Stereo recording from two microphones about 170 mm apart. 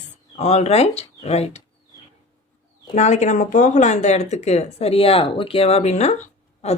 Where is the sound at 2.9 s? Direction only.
40° left (ahead or behind).